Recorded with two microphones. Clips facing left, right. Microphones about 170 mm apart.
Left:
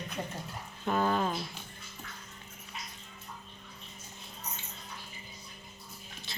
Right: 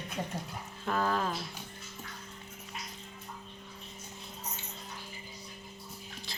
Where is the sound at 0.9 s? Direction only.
5° left (ahead or behind).